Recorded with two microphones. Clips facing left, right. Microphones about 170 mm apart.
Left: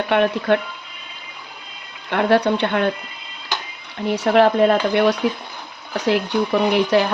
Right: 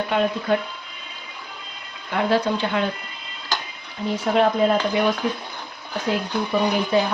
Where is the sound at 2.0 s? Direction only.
65° left (ahead or behind).